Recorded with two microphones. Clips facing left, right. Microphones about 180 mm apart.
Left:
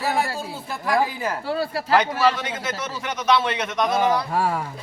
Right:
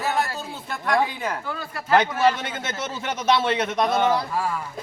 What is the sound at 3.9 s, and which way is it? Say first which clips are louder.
Speech: left 2 dB; centre (ahead or behind).